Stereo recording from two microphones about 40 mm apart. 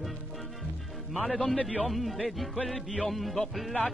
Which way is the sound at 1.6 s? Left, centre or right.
Left.